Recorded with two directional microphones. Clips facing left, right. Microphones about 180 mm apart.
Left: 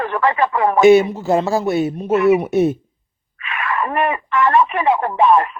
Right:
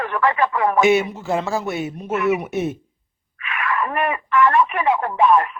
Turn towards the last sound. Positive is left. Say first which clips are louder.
# left 2 dB
turn(degrees=30)  # may be behind; listen again after turning